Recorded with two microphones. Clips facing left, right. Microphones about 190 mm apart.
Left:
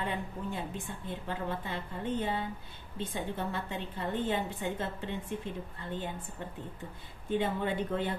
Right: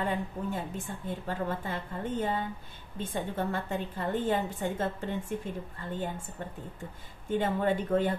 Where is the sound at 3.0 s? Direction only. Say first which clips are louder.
Right 3 dB; 50° right (ahead or behind).